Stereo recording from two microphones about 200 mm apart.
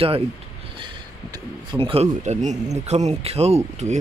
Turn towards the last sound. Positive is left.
turn(degrees=-35)  # may be behind; listen again after turning